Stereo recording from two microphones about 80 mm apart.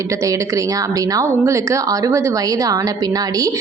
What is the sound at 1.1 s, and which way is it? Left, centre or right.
Speech, right.